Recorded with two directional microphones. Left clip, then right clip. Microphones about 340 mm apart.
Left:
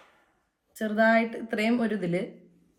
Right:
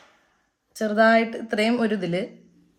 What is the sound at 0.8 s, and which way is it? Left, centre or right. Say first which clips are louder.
Speech: right 5 dB; right.